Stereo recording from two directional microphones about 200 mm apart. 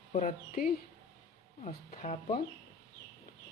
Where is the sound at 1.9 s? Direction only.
35° left (ahead or behind).